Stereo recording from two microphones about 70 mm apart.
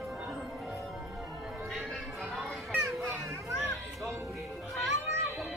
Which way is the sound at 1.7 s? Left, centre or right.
Centre.